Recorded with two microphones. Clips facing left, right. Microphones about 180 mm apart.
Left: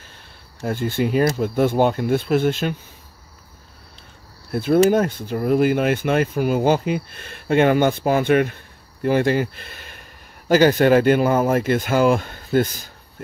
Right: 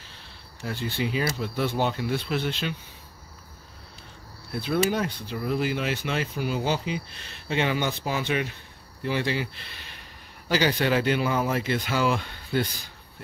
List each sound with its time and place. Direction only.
0.7 s speech: 50° left (ahead or behind)
4.5 s speech: 50° left (ahead or behind)